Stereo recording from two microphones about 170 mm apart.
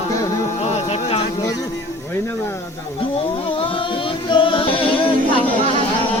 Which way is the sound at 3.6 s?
30° left (ahead or behind).